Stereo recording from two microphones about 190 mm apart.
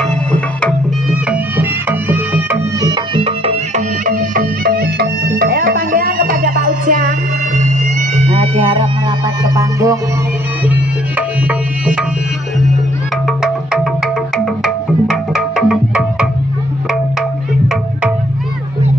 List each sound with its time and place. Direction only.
0.0 s music: 5° left (ahead or behind)
1.3 s music: 10° right (ahead or behind); by 3.8 s 30° right (ahead or behind)
4.0 s music: 45° right (ahead or behind)
9.4 s music: 15° right (ahead or behind)
13.4 s music: centre (ahead or behind)